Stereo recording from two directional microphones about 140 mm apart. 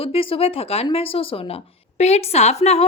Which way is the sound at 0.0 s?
40° left (ahead or behind).